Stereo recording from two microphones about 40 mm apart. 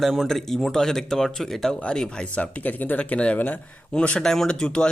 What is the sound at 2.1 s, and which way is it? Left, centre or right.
Speech, left.